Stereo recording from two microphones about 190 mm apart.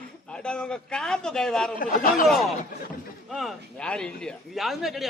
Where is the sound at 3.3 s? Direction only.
Centre (ahead or behind).